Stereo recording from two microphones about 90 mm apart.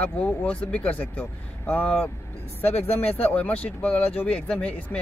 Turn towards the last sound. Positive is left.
turn(degrees=15)  # may be behind; listen again after turning